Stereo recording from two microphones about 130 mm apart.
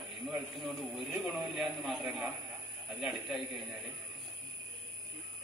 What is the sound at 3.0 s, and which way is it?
Speech, centre (ahead or behind).